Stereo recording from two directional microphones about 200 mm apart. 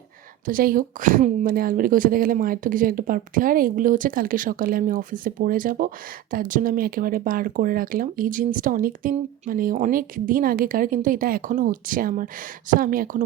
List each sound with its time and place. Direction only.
0.4 s speech: 45° right (ahead or behind)